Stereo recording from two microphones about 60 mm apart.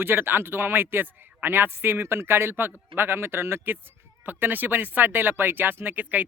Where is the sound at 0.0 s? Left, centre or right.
Right.